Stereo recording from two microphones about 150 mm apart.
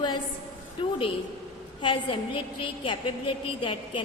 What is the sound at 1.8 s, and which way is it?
A woman's voice, 35° left (ahead or behind).